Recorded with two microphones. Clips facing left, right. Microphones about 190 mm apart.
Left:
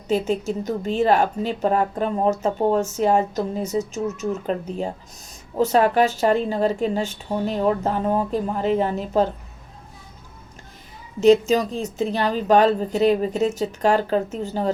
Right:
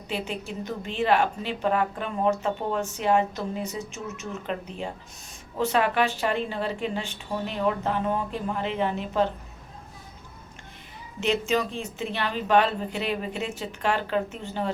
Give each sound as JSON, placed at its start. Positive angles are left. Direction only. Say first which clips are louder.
{"t": 0.1, "sound": "a woman's voice", "louder": "left 10 dB", "side_deg": 45}
{"t": 11.2, "sound": "a woman's voice", "louder": "left 10 dB", "side_deg": 40}